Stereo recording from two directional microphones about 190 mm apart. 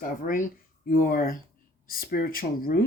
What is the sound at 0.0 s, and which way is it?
Speech, 45° left (ahead or behind).